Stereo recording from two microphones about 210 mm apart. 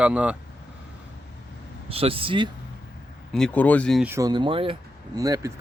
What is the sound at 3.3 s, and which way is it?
Speech, 5° left (ahead or behind).